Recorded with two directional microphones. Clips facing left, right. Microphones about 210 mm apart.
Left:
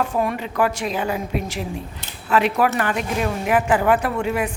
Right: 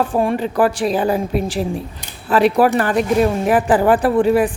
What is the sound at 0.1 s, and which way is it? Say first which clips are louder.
A woman's voice: right 5 dB; 30° right (ahead or behind).